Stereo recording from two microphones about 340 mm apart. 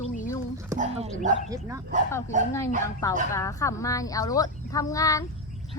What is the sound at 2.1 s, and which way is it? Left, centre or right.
Speech, centre.